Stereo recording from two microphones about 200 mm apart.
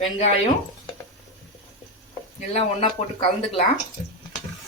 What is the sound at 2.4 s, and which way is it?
Speech, 25° left (ahead or behind).